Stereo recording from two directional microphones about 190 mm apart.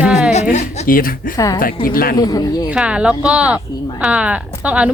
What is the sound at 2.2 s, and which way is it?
Speech, 20° left (ahead or behind).